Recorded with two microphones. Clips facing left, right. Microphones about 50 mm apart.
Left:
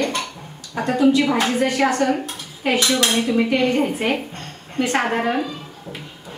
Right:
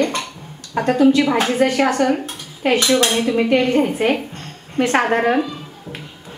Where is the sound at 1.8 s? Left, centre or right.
Right.